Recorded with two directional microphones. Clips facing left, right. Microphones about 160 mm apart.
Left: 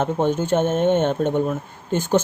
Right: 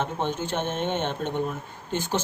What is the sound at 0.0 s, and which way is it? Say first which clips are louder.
Speech: left 7 dB; 45° left (ahead or behind).